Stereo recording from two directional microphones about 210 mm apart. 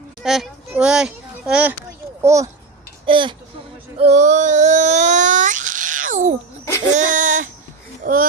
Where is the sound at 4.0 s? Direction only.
35° right (ahead or behind).